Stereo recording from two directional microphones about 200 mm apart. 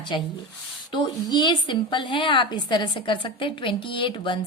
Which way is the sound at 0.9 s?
20° left (ahead or behind).